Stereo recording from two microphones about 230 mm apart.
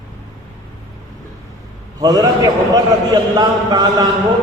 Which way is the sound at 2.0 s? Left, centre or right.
Centre.